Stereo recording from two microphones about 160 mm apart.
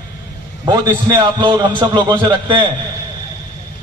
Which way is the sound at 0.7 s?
25° right (ahead or behind).